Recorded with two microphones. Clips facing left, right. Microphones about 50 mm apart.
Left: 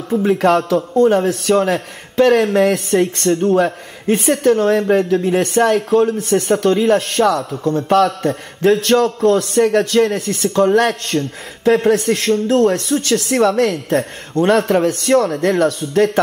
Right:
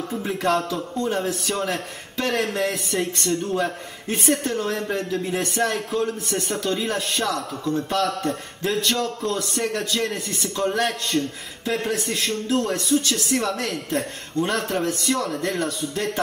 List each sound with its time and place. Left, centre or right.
0.1 s speech: left
0.9 s speech: left